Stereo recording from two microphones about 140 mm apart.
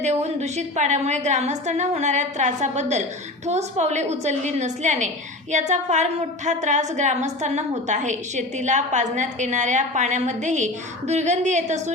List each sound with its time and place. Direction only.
0.0 s a woman's voice: 50° right (ahead or behind)